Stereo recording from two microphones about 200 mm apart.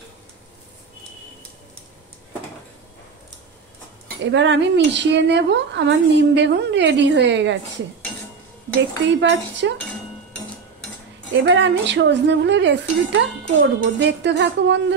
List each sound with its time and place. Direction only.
4.2 s speech: 65° right (ahead or behind)
8.7 s speech: 65° right (ahead or behind)
11.4 s speech: 65° right (ahead or behind)